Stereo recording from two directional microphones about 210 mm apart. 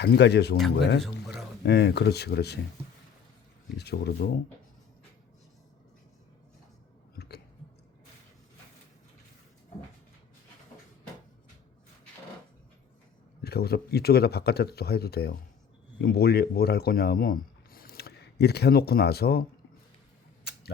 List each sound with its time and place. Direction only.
0.0 s speech: 50° left (ahead or behind)
1.6 s speech: 50° left (ahead or behind)
3.8 s speech: 50° left (ahead or behind)
7.2 s chewing: 50° left (ahead or behind)
13.4 s speech: 50° left (ahead or behind)